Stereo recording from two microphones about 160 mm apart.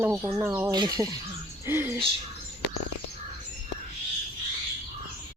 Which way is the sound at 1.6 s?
15° right (ahead or behind).